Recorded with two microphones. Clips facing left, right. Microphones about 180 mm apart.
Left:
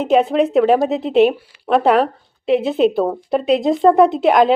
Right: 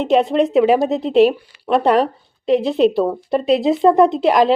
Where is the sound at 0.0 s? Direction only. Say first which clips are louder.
Even; centre (ahead or behind).